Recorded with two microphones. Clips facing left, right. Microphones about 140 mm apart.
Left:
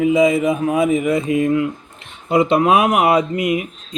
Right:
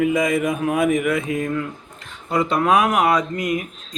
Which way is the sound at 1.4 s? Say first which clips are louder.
Left 7 dB; 15° left (ahead or behind).